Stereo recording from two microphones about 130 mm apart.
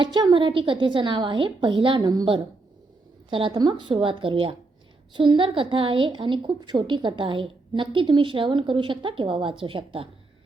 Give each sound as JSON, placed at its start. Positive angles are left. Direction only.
{"t": 0.0, "sound": "a woman's voice", "side_deg": -35}